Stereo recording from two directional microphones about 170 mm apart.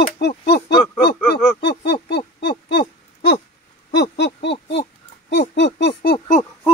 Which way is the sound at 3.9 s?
80° left.